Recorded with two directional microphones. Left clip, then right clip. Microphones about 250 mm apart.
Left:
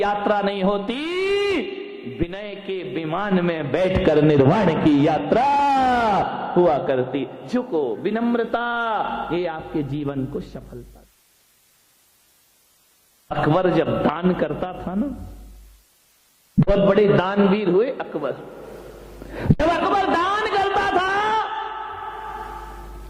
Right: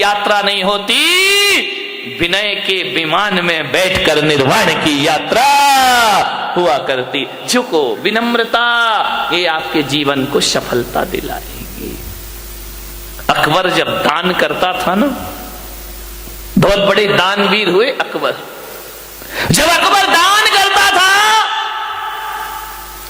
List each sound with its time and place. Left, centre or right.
0.0 s a man's voice: centre
13.3 s a man's voice: centre
16.6 s a man's voice: centre
19.3 s a sound: centre